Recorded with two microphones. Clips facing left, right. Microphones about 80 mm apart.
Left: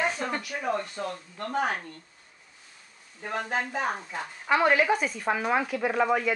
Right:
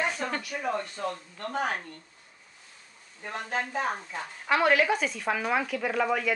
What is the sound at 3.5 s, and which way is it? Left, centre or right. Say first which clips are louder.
A child's voice: right 1 dB; centre.